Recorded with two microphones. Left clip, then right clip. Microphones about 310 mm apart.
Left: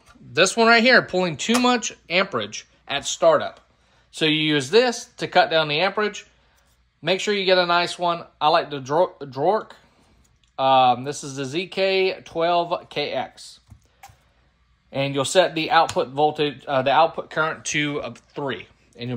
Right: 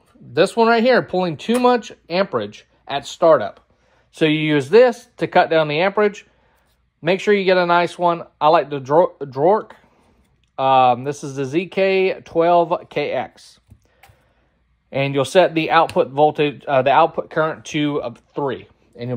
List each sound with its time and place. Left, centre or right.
0.3 s speech: centre
14.9 s speech: right